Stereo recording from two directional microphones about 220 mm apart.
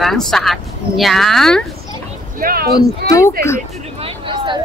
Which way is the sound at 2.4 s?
40° right (ahead or behind).